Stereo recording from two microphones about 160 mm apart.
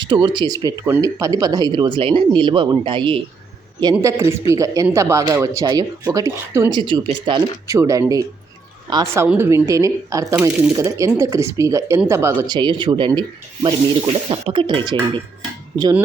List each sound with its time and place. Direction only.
0.0 s speech: 30° right (ahead or behind)
4.0 s speech: 20° right (ahead or behind)
6.7 s speech: 30° right (ahead or behind)
9.2 s speech: 10° right (ahead or behind)
10.5 s speech: 5° right (ahead or behind)
10.8 s speech: 20° right (ahead or behind)
12.5 s speech: 30° right (ahead or behind)
15.8 s speech: 15° right (ahead or behind)